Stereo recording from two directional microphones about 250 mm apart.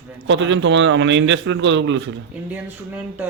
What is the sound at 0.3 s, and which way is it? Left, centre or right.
Speech, right.